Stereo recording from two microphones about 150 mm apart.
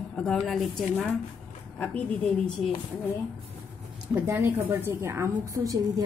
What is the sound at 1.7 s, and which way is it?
Speech, 10° left (ahead or behind).